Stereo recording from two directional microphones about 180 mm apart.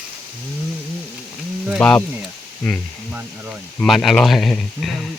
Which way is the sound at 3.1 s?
10° right (ahead or behind).